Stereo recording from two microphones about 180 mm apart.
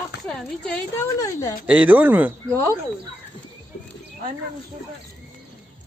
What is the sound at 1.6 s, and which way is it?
Speech, 5° right (ahead or behind).